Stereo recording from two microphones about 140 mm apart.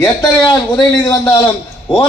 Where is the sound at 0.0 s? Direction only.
30° left (ahead or behind).